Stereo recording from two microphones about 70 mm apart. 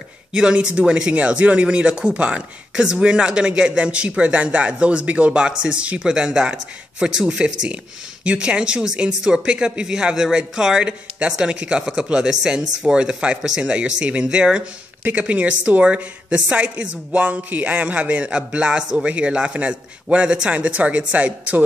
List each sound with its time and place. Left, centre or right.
0.3 s speech: centre